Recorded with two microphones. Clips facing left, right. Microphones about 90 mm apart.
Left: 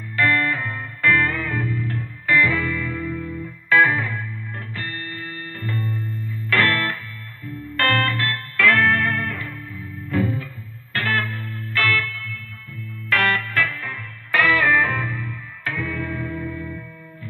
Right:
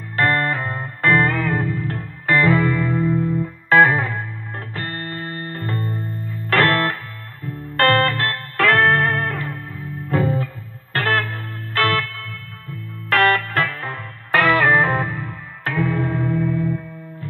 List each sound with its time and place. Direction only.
0.1 s music: 40° right (ahead or behind)